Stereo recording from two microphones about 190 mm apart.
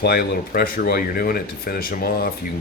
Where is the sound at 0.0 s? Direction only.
55° left (ahead or behind).